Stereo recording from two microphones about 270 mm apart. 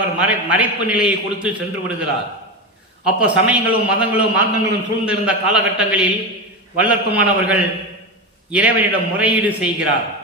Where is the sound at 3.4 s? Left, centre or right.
Centre.